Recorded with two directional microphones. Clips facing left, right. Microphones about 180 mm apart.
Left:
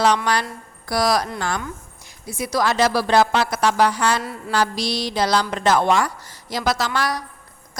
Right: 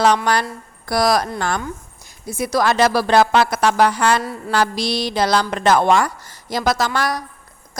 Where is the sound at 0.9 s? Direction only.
55° right (ahead or behind).